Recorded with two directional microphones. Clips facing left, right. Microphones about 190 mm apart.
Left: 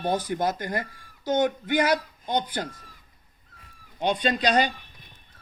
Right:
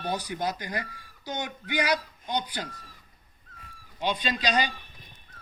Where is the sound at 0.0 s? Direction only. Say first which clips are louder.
Left 5 dB; 50° left (ahead or behind).